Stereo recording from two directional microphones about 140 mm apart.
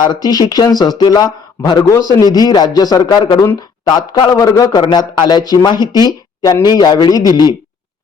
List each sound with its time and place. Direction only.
0.0 s speech: 30° left (ahead or behind)